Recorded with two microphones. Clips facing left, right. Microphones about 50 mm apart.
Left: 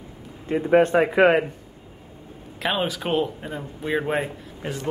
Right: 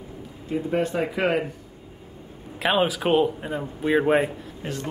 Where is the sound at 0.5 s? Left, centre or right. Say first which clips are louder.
Left 7 dB; left.